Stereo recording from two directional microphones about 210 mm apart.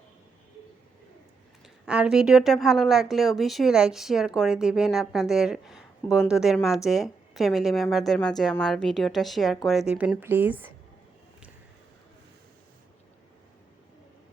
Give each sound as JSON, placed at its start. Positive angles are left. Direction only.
{"t": 1.6, "sound": "speech", "side_deg": -5}